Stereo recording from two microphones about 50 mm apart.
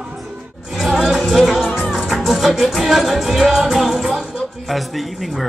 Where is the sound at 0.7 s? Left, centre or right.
Centre.